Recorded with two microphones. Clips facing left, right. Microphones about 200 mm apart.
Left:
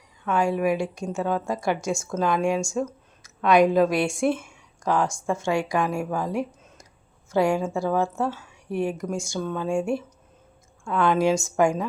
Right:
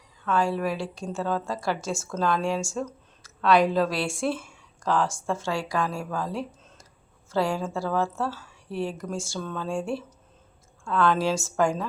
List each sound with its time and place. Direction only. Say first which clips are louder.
0.3 s a woman's voice: left 3 dB; 15° left (ahead or behind)